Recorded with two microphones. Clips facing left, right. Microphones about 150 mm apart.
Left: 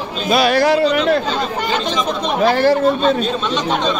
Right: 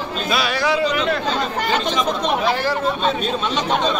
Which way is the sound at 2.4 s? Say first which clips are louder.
Left 11 dB; 70° left (ahead or behind).